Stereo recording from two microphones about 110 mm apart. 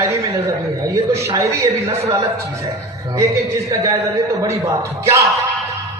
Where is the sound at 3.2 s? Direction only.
25° right (ahead or behind).